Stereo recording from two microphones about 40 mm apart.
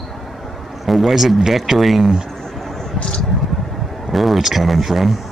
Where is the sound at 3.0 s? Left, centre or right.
Left.